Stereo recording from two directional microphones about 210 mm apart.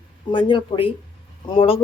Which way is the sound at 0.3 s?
20° left (ahead or behind).